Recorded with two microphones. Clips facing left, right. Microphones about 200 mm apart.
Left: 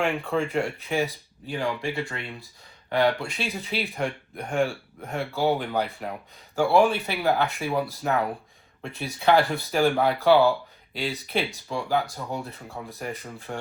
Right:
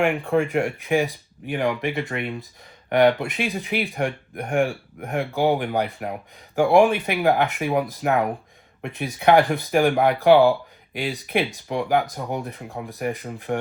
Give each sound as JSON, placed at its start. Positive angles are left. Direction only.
{"t": 0.0, "sound": "speech", "side_deg": -15}